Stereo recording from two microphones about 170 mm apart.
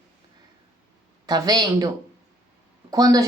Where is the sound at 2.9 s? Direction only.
20° right (ahead or behind).